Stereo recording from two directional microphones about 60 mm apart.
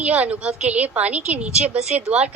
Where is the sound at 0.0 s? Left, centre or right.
Right.